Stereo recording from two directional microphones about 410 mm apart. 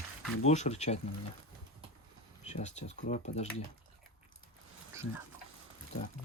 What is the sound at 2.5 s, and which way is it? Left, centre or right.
Speech, centre.